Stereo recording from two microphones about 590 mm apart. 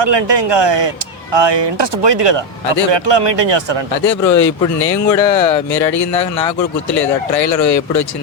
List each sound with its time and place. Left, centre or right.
0.0 s speech: right
4.4 s speech: left